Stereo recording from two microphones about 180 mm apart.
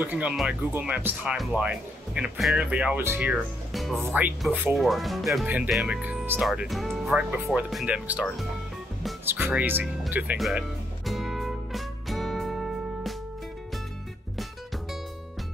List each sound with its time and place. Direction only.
0.0 s speech: 5° right (ahead or behind)
11.1 s music: centre (ahead or behind)